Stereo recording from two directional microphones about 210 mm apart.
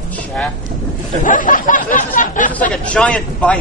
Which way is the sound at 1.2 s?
40° left (ahead or behind).